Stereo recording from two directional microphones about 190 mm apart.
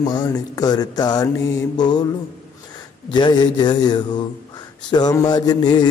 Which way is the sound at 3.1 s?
25° left (ahead or behind).